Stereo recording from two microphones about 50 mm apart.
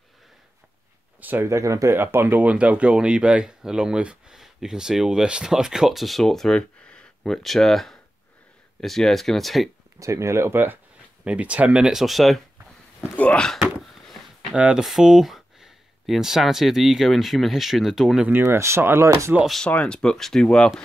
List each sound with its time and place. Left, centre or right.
1.4 s speech: right
2.0 s speech: right
2.3 s speech: right; by 6.5 s centre
6.5 s a sound: centre
7.4 s speech: centre
9.9 s speech: right
11.2 s speech: right
11.8 s speech: centre
14.5 s speech: right
14.8 s speech: centre
18.3 s speech: right
19.0 s speech: right
19.7 s speech: left